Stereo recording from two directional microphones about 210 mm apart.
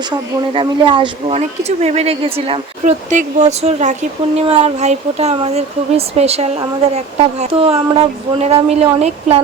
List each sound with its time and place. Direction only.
0.5 s speech: 25° right (ahead or behind)